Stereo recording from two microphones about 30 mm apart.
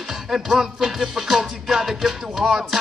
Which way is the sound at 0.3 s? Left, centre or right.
Centre.